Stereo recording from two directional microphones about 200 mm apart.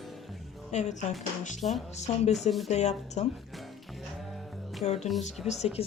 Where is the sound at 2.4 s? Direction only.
Centre (ahead or behind).